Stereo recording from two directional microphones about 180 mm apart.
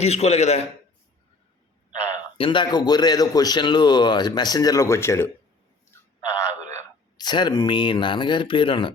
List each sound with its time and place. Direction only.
0.0 s a man's voice: 35° left (ahead or behind)
1.9 s a man's voice: 25° left (ahead or behind)
5.9 s a sound: 15° left (ahead or behind)
7.2 s a man's voice: 25° left (ahead or behind)